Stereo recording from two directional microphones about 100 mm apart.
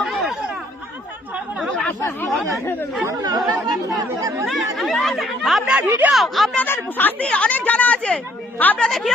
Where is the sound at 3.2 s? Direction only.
40° right (ahead or behind).